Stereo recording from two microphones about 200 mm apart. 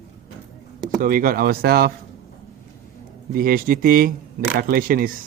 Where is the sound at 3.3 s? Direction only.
45° right (ahead or behind).